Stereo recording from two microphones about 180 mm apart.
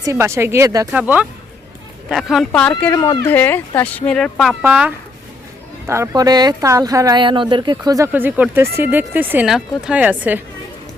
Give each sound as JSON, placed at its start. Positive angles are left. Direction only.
{"t": 0.0, "sound": "speech", "side_deg": -15}
{"t": 0.9, "sound": "speech", "side_deg": -5}
{"t": 4.6, "sound": "speech", "side_deg": -10}